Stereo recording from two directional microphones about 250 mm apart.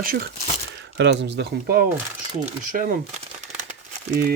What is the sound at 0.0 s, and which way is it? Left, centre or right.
A man's voice, right.